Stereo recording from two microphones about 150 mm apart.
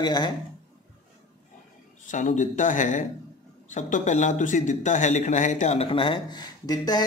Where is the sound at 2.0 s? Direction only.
55° left (ahead or behind).